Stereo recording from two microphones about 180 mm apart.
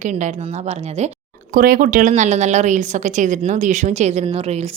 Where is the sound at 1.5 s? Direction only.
55° right (ahead or behind).